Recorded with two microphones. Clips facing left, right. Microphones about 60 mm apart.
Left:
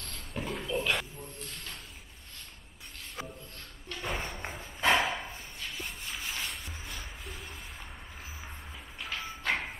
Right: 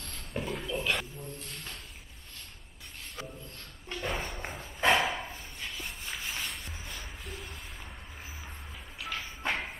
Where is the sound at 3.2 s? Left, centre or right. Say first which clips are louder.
Left 1 dB; centre.